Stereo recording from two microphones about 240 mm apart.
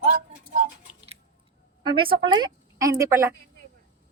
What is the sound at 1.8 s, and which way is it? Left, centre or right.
A woman's voice, right.